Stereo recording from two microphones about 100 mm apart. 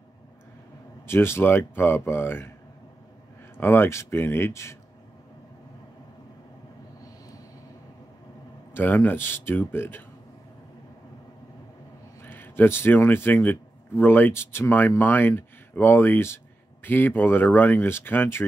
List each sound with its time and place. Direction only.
1.0 s speech: 25° left (ahead or behind)
3.5 s speech: 25° left (ahead or behind)
8.7 s speech: 20° left (ahead or behind)
12.2 s speech: 20° left (ahead or behind)